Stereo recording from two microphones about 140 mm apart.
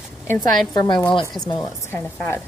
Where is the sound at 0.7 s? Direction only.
30° left (ahead or behind).